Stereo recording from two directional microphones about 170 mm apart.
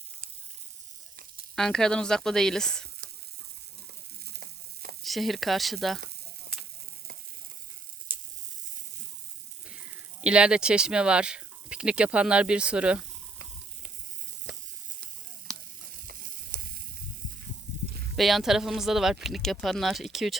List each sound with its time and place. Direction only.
1.5 s speech: 5° left (ahead or behind)
4.3 s frying: 65° right (ahead or behind)
5.0 s speech: centre (ahead or behind)
9.6 s speech: 5° right (ahead or behind)
16.0 s sizzle: 55° right (ahead or behind)
18.2 s speech: centre (ahead or behind)